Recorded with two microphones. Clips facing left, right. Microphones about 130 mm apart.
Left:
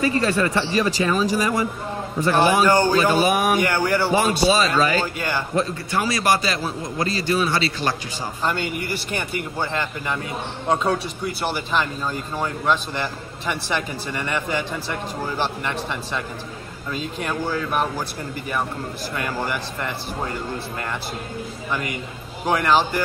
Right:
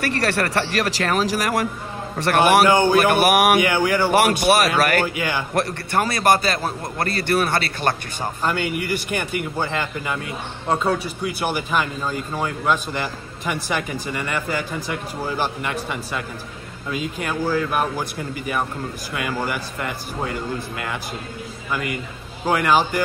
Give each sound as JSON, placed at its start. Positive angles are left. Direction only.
{"t": 0.0, "sound": "speech", "side_deg": -75}
{"t": 2.1, "sound": "a man's voice", "side_deg": -75}
{"t": 2.7, "sound": "speech", "side_deg": -15}
{"t": 3.0, "sound": "a man's voice", "side_deg": -70}
{"t": 3.6, "sound": "speech", "side_deg": -15}
{"t": 4.1, "sound": "a man's voice", "side_deg": -75}
{"t": 5.1, "sound": "speech", "side_deg": -15}
{"t": 5.9, "sound": "a man's voice", "side_deg": -55}
{"t": 8.4, "sound": "speech", "side_deg": -10}
{"t": 12.4, "sound": "speech", "side_deg": -10}
{"t": 22.5, "sound": "speech", "side_deg": -10}